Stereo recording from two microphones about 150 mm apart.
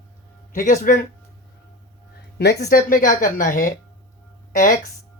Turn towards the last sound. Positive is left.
turn(degrees=60)  # may be behind; listen again after turning